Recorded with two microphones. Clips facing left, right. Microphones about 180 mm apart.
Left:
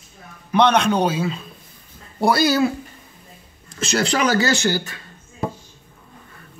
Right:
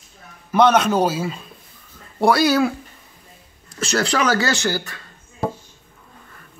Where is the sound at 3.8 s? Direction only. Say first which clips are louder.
Even; 20° left (ahead or behind).